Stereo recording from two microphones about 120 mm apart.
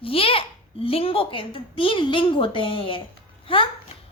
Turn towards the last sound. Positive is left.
turn(degrees=45)  # may be behind; listen again after turning